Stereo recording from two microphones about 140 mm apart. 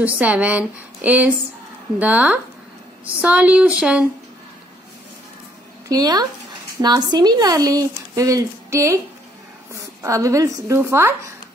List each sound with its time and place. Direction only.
0.0 s a woman's voice: 10° right (ahead or behind)
5.9 s speech: 30° right (ahead or behind)
10.0 s speech: 20° right (ahead or behind)